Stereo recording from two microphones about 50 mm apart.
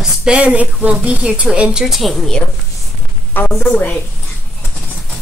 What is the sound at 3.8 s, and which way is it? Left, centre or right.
Speech, left.